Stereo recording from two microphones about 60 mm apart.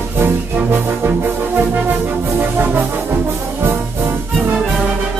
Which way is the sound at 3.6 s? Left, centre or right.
Right.